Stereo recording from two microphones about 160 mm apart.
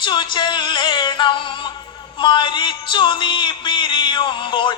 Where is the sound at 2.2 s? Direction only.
30° left (ahead or behind).